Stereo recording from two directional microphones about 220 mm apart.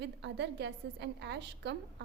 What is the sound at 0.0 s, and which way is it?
A woman's voice, 50° right (ahead or behind).